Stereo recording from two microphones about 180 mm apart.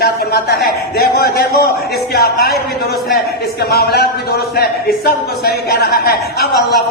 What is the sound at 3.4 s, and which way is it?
A man's voice, 60° left (ahead or behind).